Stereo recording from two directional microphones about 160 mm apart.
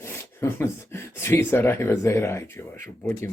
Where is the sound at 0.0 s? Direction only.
15° left (ahead or behind).